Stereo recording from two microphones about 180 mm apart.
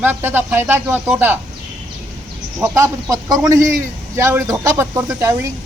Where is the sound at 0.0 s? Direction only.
10° right (ahead or behind).